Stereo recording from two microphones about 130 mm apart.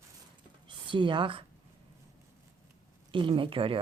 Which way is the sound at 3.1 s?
40° right (ahead or behind).